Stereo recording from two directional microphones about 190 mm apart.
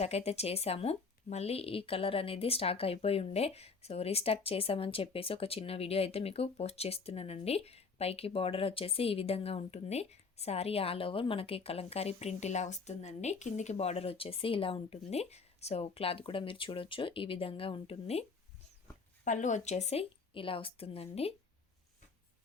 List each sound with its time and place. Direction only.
0.0 s speech: 35° left (ahead or behind)